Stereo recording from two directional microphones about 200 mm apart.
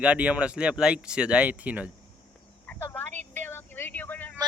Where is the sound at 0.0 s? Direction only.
5° right (ahead or behind).